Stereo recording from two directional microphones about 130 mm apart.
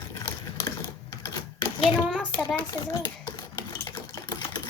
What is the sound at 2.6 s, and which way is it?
Typewriter, 30° left (ahead or behind).